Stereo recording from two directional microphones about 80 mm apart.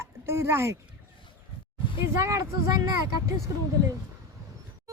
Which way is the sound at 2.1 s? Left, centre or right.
Right.